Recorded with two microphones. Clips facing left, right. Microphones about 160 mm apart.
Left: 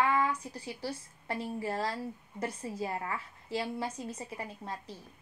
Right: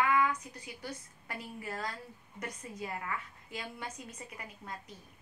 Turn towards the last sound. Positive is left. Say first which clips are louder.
# left 5 dB
turn(degrees=30)  # may be behind; listen again after turning